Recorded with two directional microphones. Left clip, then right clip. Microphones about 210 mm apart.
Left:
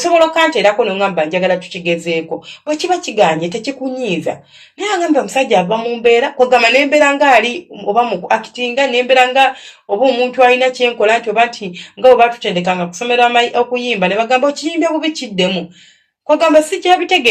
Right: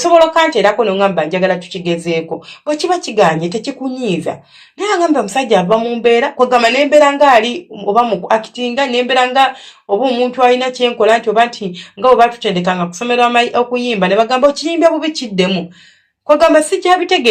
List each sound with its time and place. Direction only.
0.0 s speech: 25° right (ahead or behind)